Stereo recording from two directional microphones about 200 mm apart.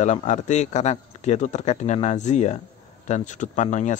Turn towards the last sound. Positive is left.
turn(degrees=35)  # may be behind; listen again after turning